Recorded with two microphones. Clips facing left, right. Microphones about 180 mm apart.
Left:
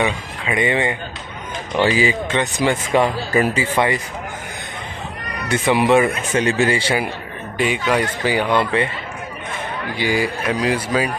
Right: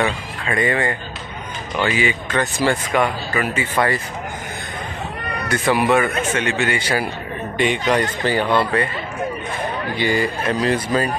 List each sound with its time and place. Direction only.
0.0 s speech: 15° left (ahead or behind)
1.8 s speech: 30° left (ahead or behind)
3.7 s speech: 15° left (ahead or behind)
5.5 s speech: 25° left (ahead or behind)
7.5 s speech: 5° left (ahead or behind)
9.9 s speech: 10° left (ahead or behind)